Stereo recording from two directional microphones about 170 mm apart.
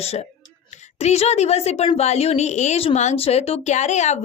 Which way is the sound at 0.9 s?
40° left (ahead or behind).